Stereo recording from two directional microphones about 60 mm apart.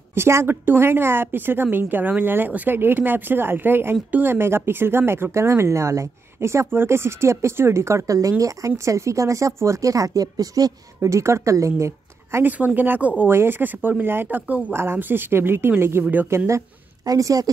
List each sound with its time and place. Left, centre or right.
0.1 s a woman's voice: right
11.0 s a woman's voice: right
12.4 s a woman's voice: right
17.0 s speech: right